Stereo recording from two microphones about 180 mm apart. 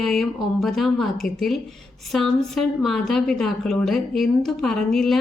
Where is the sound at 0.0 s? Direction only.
Centre (ahead or behind).